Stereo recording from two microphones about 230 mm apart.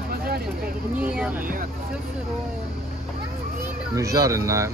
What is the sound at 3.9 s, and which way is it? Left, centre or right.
Speech, centre.